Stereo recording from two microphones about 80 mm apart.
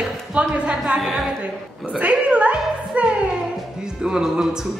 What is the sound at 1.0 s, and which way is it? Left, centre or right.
Speech, centre.